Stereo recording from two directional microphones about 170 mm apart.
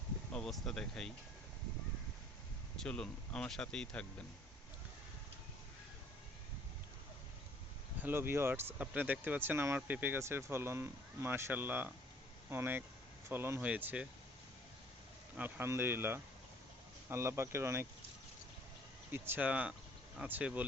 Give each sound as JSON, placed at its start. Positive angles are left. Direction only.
{"t": 0.3, "sound": "speech", "side_deg": 5}
{"t": 2.7, "sound": "speech", "side_deg": 5}
{"t": 7.9, "sound": "speech", "side_deg": -10}
{"t": 15.4, "sound": "speech", "side_deg": -10}
{"t": 19.1, "sound": "speech", "side_deg": -15}